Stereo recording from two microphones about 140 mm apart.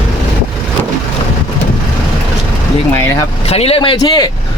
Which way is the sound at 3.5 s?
45° left (ahead or behind).